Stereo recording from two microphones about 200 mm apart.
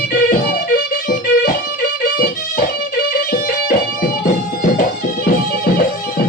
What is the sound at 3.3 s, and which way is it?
Music, 45° left (ahead or behind).